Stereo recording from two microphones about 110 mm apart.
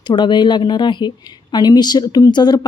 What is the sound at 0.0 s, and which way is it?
A woman's voice, 40° left (ahead or behind).